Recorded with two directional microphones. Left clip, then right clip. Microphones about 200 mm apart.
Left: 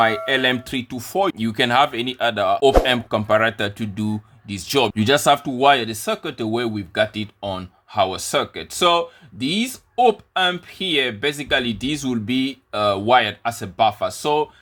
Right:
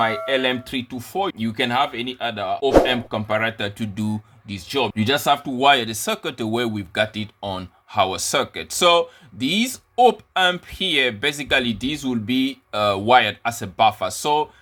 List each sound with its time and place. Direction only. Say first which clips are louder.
0.3 s speech: left 2 dB; 20° left (ahead or behind)
4.5 s speech: left 3 dB; 25° left (ahead or behind); by 14.4 s 5° left (ahead or behind)